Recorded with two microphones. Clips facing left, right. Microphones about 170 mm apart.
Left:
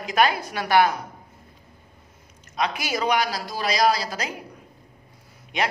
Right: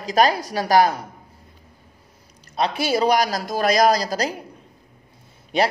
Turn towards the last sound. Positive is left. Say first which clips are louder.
# right 6 dB
turn(degrees=-35)  # may be behind; listen again after turning